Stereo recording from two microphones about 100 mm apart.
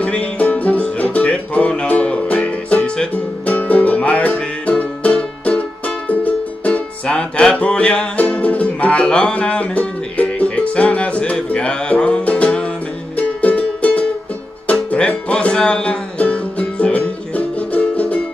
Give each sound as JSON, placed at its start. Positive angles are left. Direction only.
{"t": 0.0, "sound": "music", "side_deg": 15}